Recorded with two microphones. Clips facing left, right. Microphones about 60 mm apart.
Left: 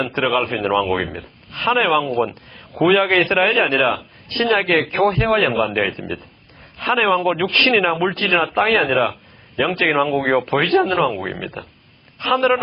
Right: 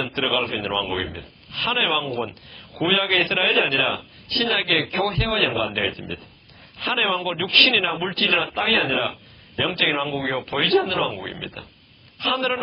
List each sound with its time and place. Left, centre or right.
0.2 s speech: left
0.5 s speech: left
4.9 s speech: left
10.1 s speech: left